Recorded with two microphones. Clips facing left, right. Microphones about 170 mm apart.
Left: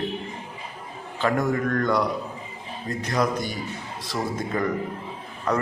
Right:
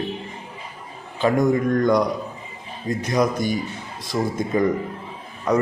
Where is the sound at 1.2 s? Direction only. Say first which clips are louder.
Right 5 dB; 15° right (ahead or behind).